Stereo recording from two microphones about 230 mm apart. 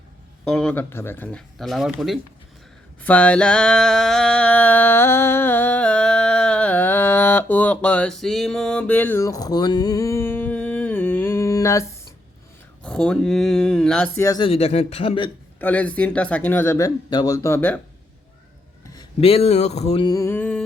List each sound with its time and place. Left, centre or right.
0.4 s speech: centre
3.0 s a sound: centre
12.8 s speech: centre
14.3 s speech: centre
15.5 s speech: centre
18.9 s mantra: left; by 20.7 s centre